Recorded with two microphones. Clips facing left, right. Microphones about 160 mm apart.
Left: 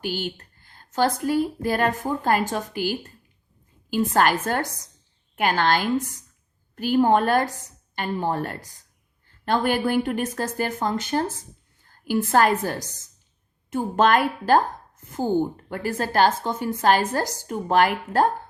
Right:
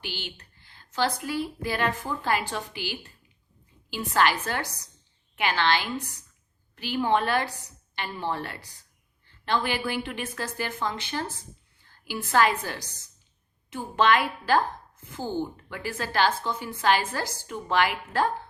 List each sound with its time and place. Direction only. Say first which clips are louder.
0.0 s a woman's voice: left 10 dB; 45° left (ahead or behind)